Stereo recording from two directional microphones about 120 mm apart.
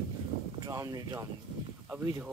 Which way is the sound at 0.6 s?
30° right (ahead or behind).